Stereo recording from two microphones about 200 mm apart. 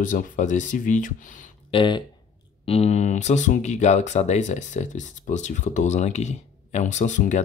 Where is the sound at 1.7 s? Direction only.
25° left (ahead or behind).